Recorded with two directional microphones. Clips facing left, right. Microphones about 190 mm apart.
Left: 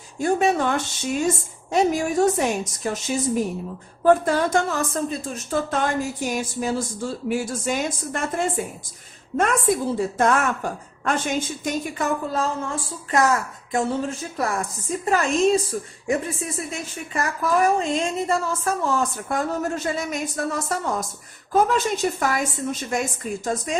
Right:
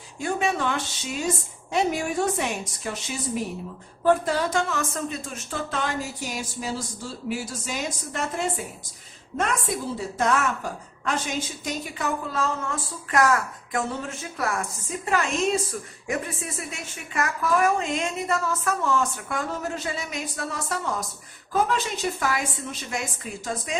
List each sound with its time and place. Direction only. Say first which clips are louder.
0.2 s a woman's voice: left 6 dB; 40° left (ahead or behind)
4.8 s a woman's voice: left 4 dB; 35° left (ahead or behind); by 8.4 s 50° left (ahead or behind)
10.2 s a woman's voice: left 1 dB; 50° left (ahead or behind)
12.3 s a woman's voice: left 3 dB; 30° left (ahead or behind)